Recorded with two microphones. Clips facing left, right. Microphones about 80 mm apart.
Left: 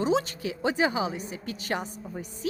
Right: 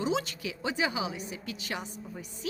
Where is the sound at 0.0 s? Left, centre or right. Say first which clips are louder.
Left 5 dB; left.